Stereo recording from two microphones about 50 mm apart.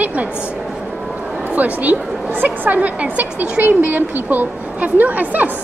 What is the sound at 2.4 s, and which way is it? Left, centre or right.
Speech, right.